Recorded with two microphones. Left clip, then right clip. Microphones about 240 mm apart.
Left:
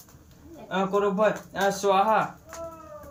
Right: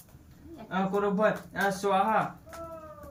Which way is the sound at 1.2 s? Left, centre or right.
Centre.